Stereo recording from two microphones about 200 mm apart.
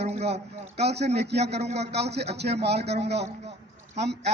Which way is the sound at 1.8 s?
55° right (ahead or behind).